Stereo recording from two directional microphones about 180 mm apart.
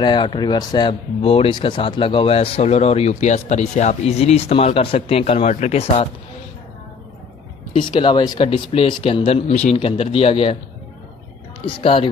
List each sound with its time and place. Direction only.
0.0 s speech: 25° left (ahead or behind)
7.7 s speech: 25° left (ahead or behind)
11.6 s speech: 30° left (ahead or behind)